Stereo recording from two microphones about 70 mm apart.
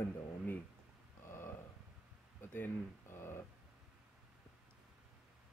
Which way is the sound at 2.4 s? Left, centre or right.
Left.